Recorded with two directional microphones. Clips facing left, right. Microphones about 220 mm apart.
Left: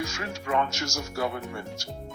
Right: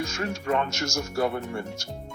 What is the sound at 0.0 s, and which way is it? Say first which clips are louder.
Speech: right 3 dB; 50° right (ahead or behind).